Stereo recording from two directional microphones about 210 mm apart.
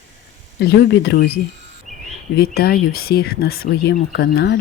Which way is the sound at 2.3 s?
45° left (ahead or behind).